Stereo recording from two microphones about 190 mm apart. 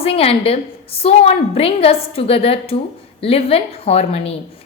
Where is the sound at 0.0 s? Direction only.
30° left (ahead or behind).